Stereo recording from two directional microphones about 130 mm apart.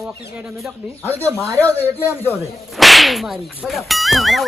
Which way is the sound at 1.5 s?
15° left (ahead or behind).